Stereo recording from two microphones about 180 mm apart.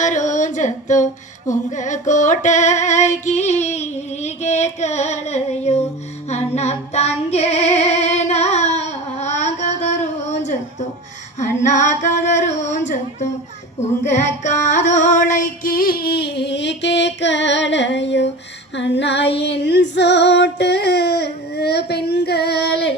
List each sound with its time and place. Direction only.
0.0 s a sound: 40° left (ahead or behind)
1.5 s female singing: 40° left (ahead or behind)
14.1 s music: 40° left (ahead or behind); by 23.0 s 70° left (ahead or behind)